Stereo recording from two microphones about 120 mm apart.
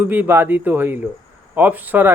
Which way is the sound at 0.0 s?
15° right (ahead or behind).